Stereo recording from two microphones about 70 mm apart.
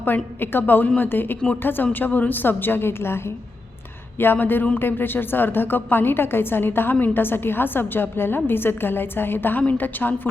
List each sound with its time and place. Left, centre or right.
0.0 s a woman's voice: left